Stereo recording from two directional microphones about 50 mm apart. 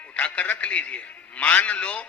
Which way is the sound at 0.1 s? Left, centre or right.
Left.